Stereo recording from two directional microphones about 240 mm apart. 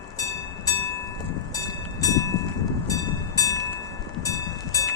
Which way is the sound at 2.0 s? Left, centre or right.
Centre.